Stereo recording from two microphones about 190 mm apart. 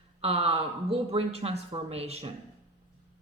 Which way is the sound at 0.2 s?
30° right (ahead or behind).